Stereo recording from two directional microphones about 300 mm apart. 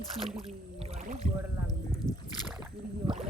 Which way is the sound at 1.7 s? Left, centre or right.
Centre.